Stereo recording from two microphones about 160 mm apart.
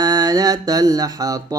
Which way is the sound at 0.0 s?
25° right (ahead or behind).